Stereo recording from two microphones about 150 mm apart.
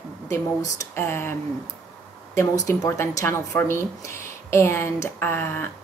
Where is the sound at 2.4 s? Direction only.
20° left (ahead or behind).